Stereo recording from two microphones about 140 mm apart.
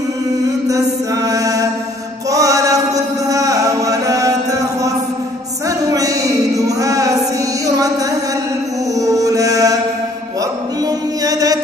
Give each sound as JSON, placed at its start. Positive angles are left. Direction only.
{"t": 0.7, "sound": "music", "side_deg": -25}
{"t": 2.3, "sound": "chant", "side_deg": -25}
{"t": 5.8, "sound": "a sound", "side_deg": -25}
{"t": 8.9, "sound": "music", "side_deg": -25}
{"t": 11.2, "sound": "music", "side_deg": -25}